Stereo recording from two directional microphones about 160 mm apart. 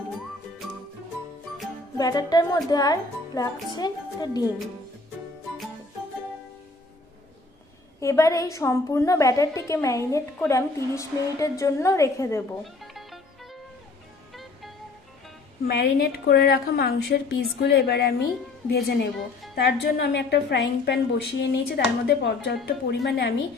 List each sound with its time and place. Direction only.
2.0 s a woman's voice: 25° left (ahead or behind)
8.0 s a woman's voice: 20° left (ahead or behind)
12.6 s music: centre (ahead or behind)
15.6 s a woman's voice: 70° left (ahead or behind); by 23.3 s 90° left